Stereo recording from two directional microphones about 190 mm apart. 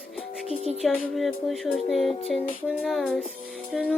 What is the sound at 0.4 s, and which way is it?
Speech, 35° left (ahead or behind).